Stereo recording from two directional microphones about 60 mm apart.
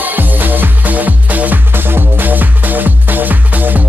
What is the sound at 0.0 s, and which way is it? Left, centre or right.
Music, right.